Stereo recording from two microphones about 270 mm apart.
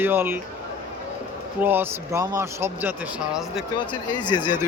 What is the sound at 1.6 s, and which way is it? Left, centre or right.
Speech, centre.